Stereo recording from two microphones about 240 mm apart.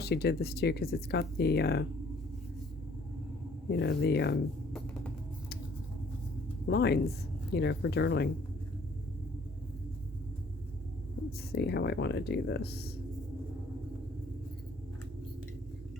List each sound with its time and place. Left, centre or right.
0.0 s speech: left
3.7 s speech: left
6.7 s speech: left
11.3 s speech: left